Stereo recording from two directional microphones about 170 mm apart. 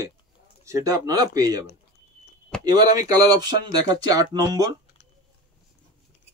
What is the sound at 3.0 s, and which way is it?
Speech, 20° right (ahead or behind).